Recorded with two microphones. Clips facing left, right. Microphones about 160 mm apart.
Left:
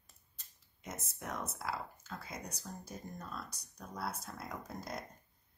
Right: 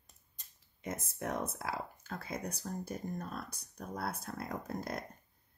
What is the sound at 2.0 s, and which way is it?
Speech, 55° right (ahead or behind).